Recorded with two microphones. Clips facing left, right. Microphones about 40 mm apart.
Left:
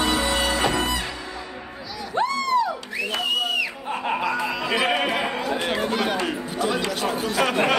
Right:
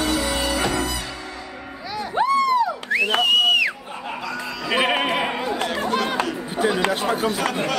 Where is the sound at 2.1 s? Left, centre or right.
Centre.